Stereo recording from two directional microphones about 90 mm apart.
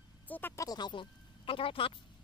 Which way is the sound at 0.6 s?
50° left (ahead or behind).